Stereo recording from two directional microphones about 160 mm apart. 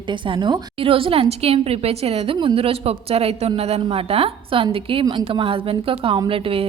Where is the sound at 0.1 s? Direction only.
30° right (ahead or behind).